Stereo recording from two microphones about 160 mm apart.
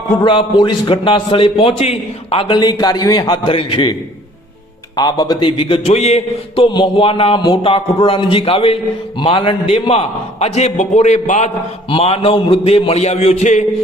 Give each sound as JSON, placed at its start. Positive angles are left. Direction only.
{"t": 0.2, "sound": "a man's voice", "side_deg": 30}
{"t": 4.9, "sound": "a man's voice", "side_deg": 25}
{"t": 13.4, "sound": "a sound", "side_deg": 50}